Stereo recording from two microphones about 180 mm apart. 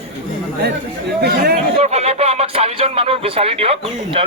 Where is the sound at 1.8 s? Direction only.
35° right (ahead or behind).